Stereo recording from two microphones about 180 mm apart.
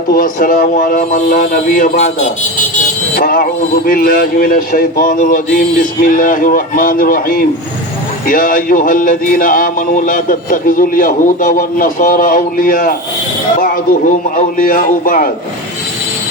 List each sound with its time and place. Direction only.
0.1 s music: 50° left (ahead or behind)
3.2 s music: 50° left (ahead or behind)
14.3 s music: 50° left (ahead or behind)